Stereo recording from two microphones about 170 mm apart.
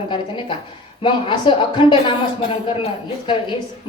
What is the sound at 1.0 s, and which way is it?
A woman's voice, 30° left (ahead or behind).